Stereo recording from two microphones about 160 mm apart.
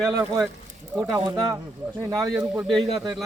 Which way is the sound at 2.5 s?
Centre (ahead or behind).